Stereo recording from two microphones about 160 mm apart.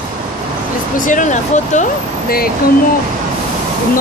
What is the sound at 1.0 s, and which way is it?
Speech, 55° left (ahead or behind).